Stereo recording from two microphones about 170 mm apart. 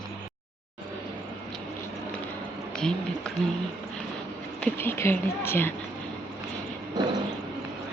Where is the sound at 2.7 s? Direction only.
5° left (ahead or behind).